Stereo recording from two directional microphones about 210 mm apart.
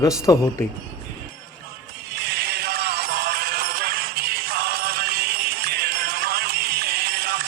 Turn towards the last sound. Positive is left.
turn(degrees=-45)  # may be behind; listen again after turning